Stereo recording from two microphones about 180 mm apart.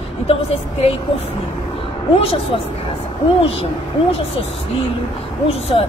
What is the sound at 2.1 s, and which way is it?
Speech, 30° left (ahead or behind).